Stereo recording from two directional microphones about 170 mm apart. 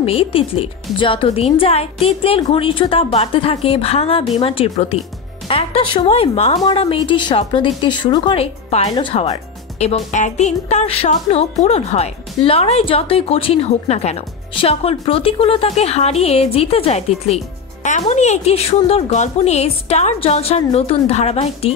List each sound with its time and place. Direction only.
0.0 s music: 35° left (ahead or behind)
6.6 s a woman's voice: 30° left (ahead or behind)
9.8 s music: 40° left (ahead or behind)